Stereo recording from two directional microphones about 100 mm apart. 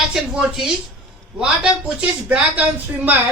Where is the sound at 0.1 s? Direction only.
5° right (ahead or behind).